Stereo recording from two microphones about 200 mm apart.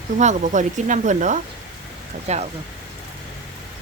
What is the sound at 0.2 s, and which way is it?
Speech, 35° right (ahead or behind).